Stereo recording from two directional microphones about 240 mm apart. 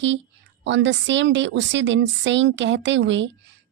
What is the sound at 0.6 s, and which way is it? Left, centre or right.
Speech, right.